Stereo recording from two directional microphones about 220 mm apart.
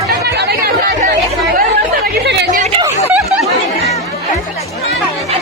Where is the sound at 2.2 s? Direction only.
50° right (ahead or behind).